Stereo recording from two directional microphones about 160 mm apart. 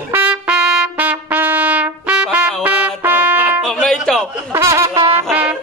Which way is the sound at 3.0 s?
10° right (ahead or behind).